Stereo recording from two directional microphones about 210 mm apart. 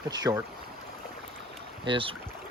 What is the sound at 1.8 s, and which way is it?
Speech, 25° right (ahead or behind).